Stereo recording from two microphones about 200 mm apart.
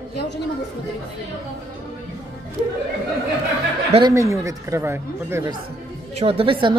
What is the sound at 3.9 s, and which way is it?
Speech, 20° right (ahead or behind).